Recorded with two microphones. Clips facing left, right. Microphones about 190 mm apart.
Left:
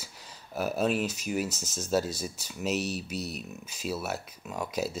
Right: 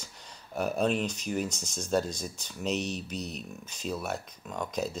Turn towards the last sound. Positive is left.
turn(degrees=5)  # may be behind; listen again after turning